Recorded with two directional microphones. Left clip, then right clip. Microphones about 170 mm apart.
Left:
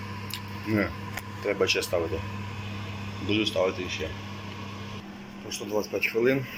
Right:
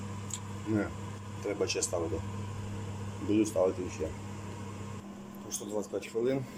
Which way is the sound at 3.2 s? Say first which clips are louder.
Left 3 dB; 20° right (ahead or behind).